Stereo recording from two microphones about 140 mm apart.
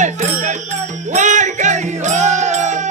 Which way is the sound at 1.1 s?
60° right (ahead or behind).